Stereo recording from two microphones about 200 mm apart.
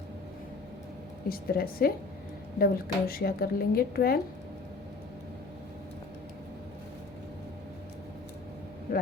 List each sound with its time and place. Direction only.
1.3 s a woman's voice: 50° left (ahead or behind)